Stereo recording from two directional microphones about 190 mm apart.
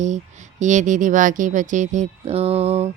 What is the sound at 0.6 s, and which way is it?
Speech, 40° right (ahead or behind).